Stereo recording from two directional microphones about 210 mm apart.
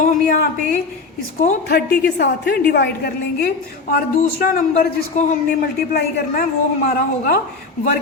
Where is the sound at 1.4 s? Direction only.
45° left (ahead or behind).